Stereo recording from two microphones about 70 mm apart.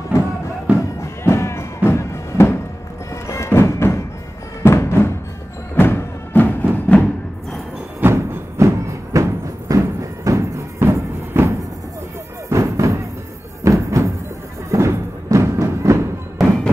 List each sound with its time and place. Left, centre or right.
0.7 s music: centre
1.0 s music: left
8.0 s music: right
16.3 s music: centre